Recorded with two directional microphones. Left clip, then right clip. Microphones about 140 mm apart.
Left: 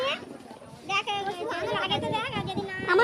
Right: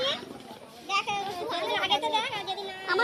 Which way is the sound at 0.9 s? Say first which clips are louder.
Even; 45° left (ahead or behind).